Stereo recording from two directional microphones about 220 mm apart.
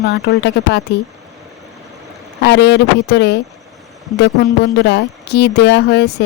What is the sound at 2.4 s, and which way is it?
Speech, 50° left (ahead or behind).